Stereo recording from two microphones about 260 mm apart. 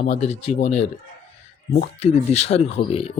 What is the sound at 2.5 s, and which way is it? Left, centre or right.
Speech, left.